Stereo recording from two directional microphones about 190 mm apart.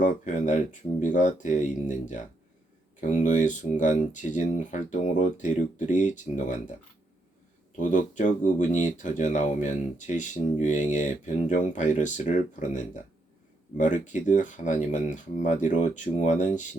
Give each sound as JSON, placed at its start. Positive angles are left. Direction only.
{"t": 0.0, "sound": "speech", "side_deg": 40}
{"t": 7.8, "sound": "speech", "side_deg": 40}